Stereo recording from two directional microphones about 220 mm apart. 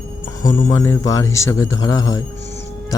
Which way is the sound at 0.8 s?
15° left (ahead or behind).